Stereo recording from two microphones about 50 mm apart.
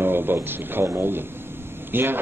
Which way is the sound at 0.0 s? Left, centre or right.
Right.